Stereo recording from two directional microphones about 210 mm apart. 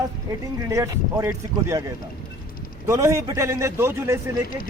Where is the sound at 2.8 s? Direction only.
15° right (ahead or behind).